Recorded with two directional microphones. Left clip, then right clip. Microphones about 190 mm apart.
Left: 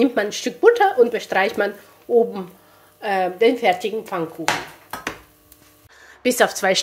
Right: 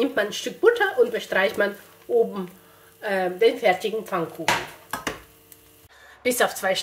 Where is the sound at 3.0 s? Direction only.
40° left (ahead or behind).